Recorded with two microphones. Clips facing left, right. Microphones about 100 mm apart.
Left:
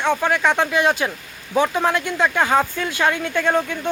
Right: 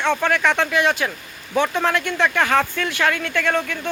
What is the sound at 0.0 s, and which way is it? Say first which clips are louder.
Speech: even; 15° left (ahead or behind).